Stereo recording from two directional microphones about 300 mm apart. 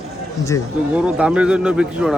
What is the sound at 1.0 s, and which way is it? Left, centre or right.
A man's voice, centre.